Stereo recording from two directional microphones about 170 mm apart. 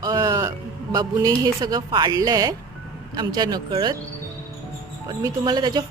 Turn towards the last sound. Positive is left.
turn(degrees=-25)  # may be behind; listen again after turning